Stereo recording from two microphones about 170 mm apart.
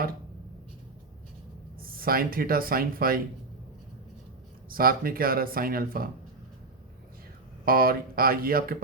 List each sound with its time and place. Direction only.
1.8 s speech: 60° right (ahead or behind)
4.7 s speech: 60° right (ahead or behind)
7.6 s speech: 60° right (ahead or behind)